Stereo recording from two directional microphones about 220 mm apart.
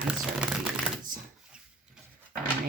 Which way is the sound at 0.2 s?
Centre (ahead or behind).